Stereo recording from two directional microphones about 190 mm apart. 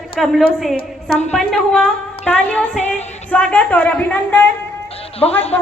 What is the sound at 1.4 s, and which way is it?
A woman's voice, centre (ahead or behind).